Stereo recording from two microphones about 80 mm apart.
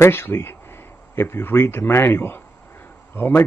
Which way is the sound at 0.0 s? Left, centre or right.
Left.